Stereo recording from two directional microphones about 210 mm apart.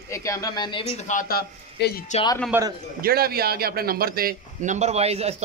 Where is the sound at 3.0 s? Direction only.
45° right (ahead or behind).